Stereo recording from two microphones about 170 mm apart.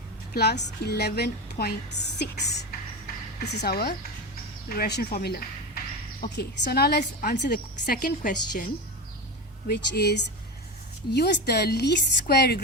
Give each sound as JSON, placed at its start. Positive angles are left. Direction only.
{"t": 0.3, "sound": "a woman's voice", "side_deg": 70}
{"t": 4.7, "sound": "a sound", "side_deg": 70}
{"t": 6.3, "sound": "a woman's voice", "side_deg": 70}
{"t": 7.0, "sound": "a woman's voice", "side_deg": 55}
{"t": 7.3, "sound": "a woman's voice", "side_deg": 75}
{"t": 9.6, "sound": "a woman's voice", "side_deg": 70}